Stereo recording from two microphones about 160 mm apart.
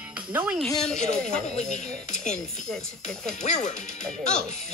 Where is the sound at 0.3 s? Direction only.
10° right (ahead or behind).